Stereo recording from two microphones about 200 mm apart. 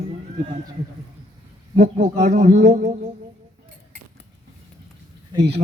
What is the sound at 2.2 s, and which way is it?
Speech, 35° right (ahead or behind).